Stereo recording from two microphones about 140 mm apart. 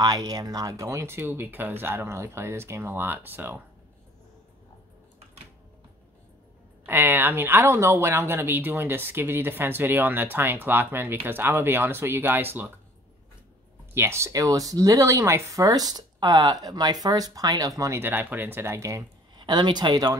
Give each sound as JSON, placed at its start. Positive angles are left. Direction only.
{"t": 0.0, "sound": "speech", "side_deg": -25}
{"t": 6.9, "sound": "speech", "side_deg": -15}
{"t": 13.9, "sound": "speech", "side_deg": -20}
{"t": 19.4, "sound": "speech", "side_deg": -30}